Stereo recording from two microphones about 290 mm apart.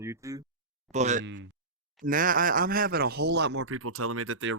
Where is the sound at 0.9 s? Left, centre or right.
Right.